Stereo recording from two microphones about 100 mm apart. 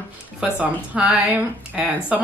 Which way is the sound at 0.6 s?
10° right (ahead or behind).